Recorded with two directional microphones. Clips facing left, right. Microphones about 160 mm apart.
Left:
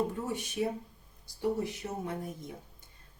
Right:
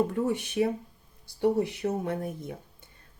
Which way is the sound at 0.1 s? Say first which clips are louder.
Right 8 dB; 65° right (ahead or behind).